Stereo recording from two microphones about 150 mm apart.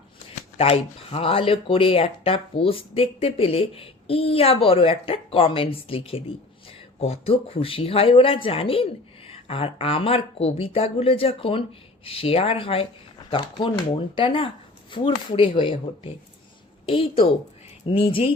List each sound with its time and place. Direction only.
0.5 s speech: 40° left (ahead or behind)